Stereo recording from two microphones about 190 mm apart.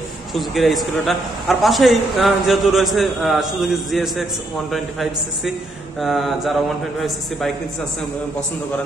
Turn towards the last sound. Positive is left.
turn(degrees=0)  # may be behind; listen again after turning